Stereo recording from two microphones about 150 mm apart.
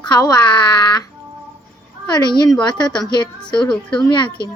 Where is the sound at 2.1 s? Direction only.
30° left (ahead or behind).